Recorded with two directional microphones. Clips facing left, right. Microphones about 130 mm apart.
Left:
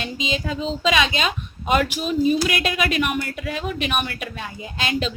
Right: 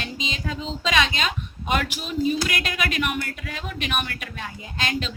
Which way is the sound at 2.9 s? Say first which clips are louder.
Left 3 dB; 15° left (ahead or behind).